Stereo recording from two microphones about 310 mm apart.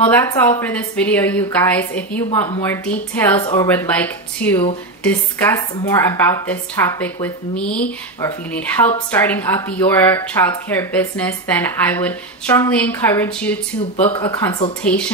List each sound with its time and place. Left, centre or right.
0.0 s speech: centre
13.9 s speech: centre